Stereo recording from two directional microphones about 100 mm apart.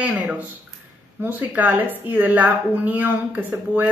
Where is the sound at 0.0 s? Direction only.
15° right (ahead or behind).